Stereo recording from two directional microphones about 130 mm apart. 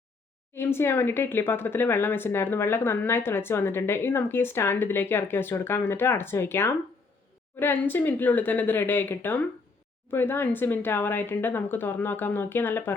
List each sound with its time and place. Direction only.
0.5 s speech: 20° left (ahead or behind)